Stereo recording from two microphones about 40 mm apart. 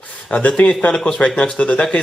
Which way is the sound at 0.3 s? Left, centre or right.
Left.